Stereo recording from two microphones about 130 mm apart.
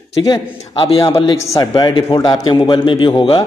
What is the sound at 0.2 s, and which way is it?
Speech, 40° left (ahead or behind).